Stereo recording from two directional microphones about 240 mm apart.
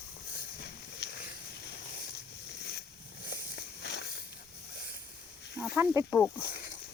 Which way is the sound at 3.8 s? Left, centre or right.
Left.